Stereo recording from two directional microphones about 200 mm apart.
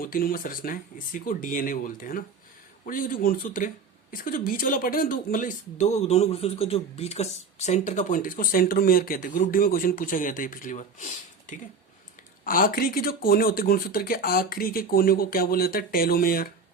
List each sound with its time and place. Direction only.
0.0 s speech: 45° left (ahead or behind)